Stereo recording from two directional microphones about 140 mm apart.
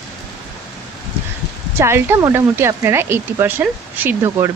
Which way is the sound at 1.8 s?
15° right (ahead or behind).